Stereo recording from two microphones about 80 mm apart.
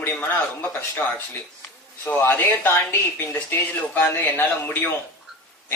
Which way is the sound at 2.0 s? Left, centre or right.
Left.